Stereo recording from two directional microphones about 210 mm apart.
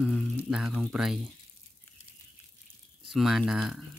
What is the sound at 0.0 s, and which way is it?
Speech, 5° right (ahead or behind).